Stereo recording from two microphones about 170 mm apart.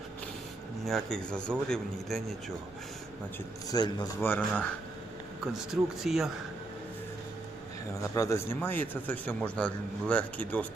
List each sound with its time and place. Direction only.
0.9 s a man's voice: centre (ahead or behind)
3.7 s a man's voice: 25° left (ahead or behind)
4.3 s a man's voice: 10° left (ahead or behind)
8.1 s a man's voice: 15° left (ahead or behind)